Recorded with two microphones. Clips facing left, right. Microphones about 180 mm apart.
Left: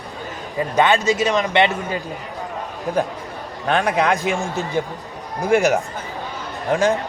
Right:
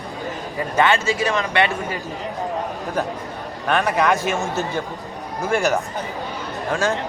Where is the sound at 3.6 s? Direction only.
15° left (ahead or behind).